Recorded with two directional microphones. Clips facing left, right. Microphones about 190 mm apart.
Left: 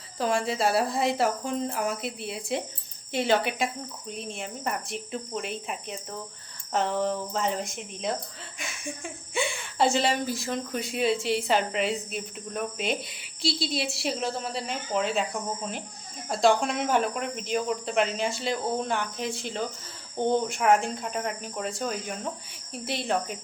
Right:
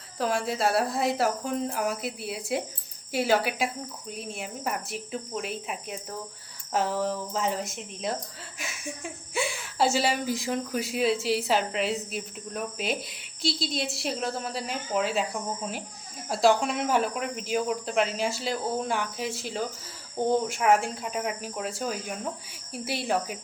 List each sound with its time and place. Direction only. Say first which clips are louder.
0.2 s speech: left 1 dB; centre (ahead or behind)
10.7 s speech: even; 5° right (ahead or behind)